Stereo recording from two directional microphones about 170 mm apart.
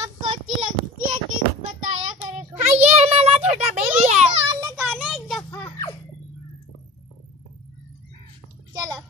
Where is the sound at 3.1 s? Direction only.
35° right (ahead or behind).